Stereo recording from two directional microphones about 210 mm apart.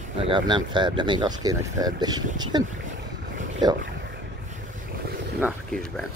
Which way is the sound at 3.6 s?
20° right (ahead or behind).